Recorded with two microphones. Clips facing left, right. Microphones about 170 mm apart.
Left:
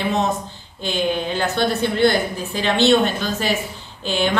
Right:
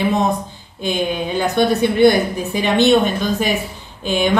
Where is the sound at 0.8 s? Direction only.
15° right (ahead or behind).